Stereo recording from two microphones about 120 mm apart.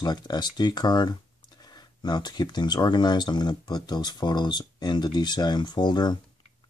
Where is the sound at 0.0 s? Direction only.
35° left (ahead or behind).